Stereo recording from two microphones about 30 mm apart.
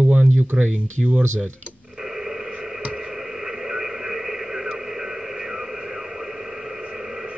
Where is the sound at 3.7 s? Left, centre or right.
Right.